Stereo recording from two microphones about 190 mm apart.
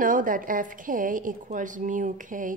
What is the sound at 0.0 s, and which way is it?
A woman's voice, 45° right (ahead or behind).